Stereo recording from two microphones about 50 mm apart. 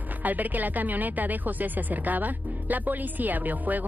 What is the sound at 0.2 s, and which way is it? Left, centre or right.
Speech, right.